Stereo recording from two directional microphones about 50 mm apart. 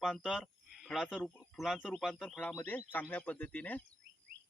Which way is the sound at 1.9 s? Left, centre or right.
Centre.